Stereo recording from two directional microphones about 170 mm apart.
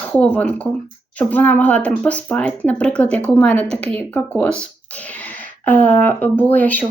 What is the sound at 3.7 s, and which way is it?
Speech, 40° right (ahead or behind).